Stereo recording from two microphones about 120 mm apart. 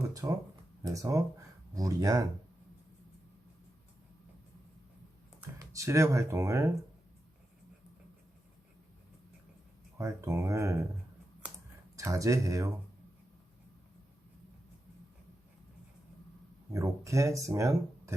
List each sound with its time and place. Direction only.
0.1 s speech: 30° right (ahead or behind)
5.5 s speech: 25° right (ahead or behind)
10.0 s speech: 25° right (ahead or behind)
11.4 s computer keyboard: 10° right (ahead or behind)
11.9 s speech: 25° right (ahead or behind)
16.7 s speech: 25° right (ahead or behind)